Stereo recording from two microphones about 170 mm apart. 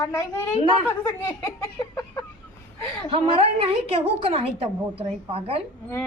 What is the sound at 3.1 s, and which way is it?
A woman's voice, 35° right (ahead or behind).